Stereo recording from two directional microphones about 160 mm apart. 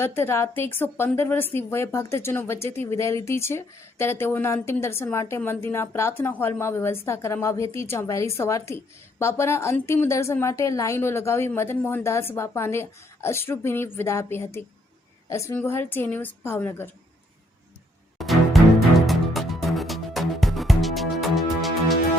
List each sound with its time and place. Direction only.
0.0 s a woman's voice: 15° left (ahead or behind)
18.2 s music: centre (ahead or behind)